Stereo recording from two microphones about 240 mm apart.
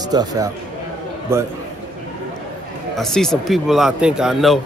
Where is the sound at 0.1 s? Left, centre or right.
Centre.